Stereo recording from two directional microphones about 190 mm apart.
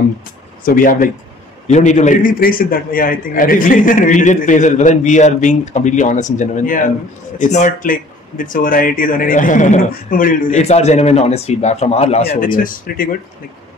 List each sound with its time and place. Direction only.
0.7 s a man's voice: 45° left (ahead or behind)
12.4 s speech: 45° left (ahead or behind)